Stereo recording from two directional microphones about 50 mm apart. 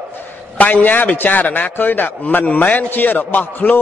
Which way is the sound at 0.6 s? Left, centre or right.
Left.